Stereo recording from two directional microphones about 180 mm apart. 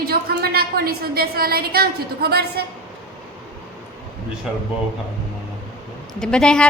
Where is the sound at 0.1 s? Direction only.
60° right (ahead or behind).